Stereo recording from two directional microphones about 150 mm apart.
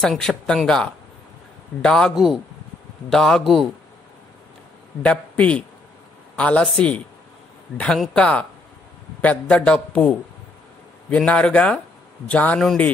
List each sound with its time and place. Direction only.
0.0 s speech: centre (ahead or behind)
5.0 s a man's voice: 10° left (ahead or behind)